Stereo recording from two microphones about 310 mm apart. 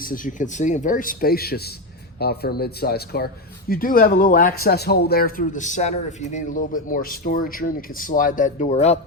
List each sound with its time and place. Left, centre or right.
0.0 s speech: left